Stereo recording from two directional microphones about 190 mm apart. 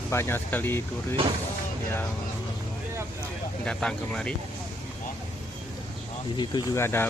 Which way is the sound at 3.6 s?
5° left (ahead or behind).